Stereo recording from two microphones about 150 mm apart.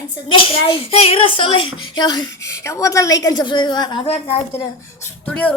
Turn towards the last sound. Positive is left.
turn(degrees=20)  # may be behind; listen again after turning